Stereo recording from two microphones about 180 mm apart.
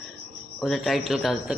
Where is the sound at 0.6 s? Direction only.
Centre (ahead or behind).